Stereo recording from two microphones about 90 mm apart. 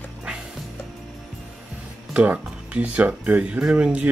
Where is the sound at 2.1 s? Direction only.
15° right (ahead or behind).